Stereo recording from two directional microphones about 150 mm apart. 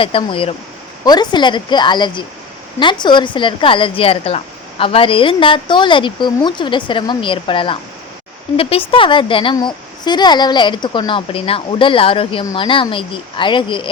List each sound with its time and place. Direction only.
0.0 s a woman's voice: 35° left (ahead or behind)